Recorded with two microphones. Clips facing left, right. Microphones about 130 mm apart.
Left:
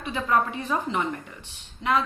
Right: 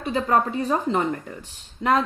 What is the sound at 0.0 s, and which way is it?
Speech, 35° right (ahead or behind).